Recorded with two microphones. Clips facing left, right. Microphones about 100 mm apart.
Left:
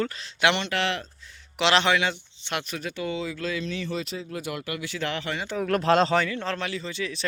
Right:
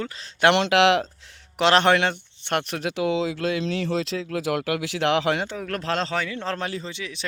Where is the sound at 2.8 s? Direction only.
90° right.